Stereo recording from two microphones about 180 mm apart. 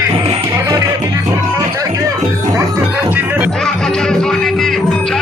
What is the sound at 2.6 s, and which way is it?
Music, 10° right (ahead or behind).